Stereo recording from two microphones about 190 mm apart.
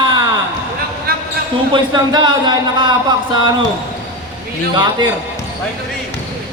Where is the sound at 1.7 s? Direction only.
25° right (ahead or behind).